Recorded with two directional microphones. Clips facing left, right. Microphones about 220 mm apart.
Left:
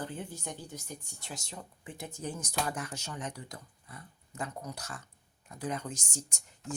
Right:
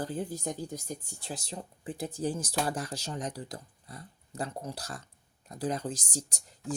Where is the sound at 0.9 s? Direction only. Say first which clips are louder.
Right 5 dB; 35° right (ahead or behind).